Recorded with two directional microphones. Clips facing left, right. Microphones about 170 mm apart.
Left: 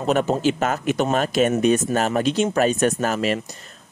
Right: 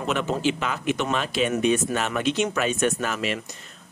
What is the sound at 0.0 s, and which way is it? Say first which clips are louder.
Speech: left 5 dB; 40° left (ahead or behind).